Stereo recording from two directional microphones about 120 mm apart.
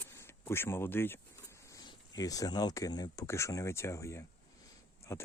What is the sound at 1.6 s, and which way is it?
Speech, 30° left (ahead or behind).